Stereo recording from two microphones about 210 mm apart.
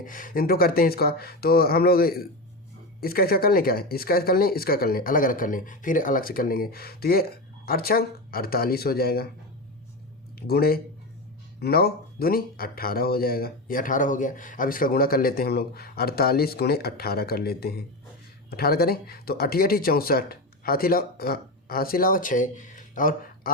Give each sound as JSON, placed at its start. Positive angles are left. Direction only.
{"t": 0.0, "sound": "speech", "side_deg": 40}
{"t": 10.4, "sound": "speech", "side_deg": 45}